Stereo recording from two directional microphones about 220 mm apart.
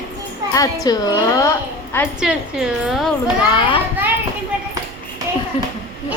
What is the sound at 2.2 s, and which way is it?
A woman's voice, 5° right (ahead or behind).